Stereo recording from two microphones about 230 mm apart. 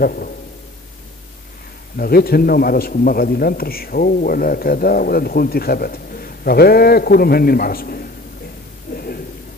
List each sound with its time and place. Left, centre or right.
0.0 s a man's voice: left
2.0 s a man's voice: left
8.9 s a sound: left